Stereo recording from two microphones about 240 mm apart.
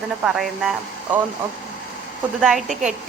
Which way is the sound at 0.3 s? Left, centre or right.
Centre.